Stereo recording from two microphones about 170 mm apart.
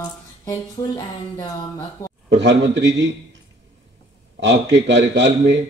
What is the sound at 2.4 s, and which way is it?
Speech, 90° right.